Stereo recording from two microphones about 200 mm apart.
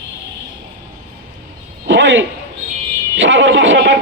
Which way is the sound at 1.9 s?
65° right (ahead or behind).